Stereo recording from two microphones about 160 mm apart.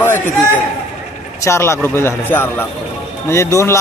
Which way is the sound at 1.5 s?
15° left (ahead or behind).